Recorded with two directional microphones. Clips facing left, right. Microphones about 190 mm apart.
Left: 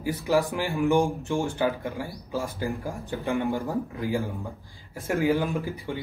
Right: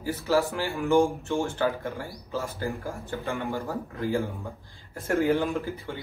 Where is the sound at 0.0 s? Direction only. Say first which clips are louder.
Left 1 dB; 15° left (ahead or behind).